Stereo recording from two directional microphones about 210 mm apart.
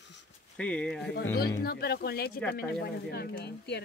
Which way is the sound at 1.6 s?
50° left (ahead or behind).